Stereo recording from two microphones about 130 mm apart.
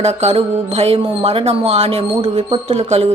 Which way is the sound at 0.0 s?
60° right (ahead or behind).